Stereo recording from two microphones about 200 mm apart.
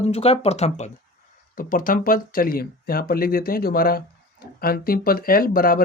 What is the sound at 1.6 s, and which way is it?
Speech, 45° left (ahead or behind).